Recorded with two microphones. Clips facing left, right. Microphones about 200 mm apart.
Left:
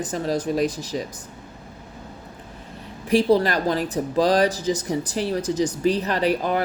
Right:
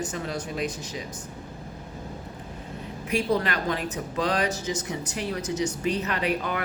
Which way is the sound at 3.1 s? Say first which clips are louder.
Left 7 dB; 30° left (ahead or behind).